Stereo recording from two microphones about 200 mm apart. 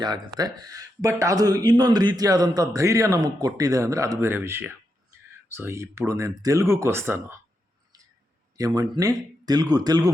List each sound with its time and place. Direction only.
0.3 s speech: 20° right (ahead or behind)
8.5 s speech: 20° right (ahead or behind)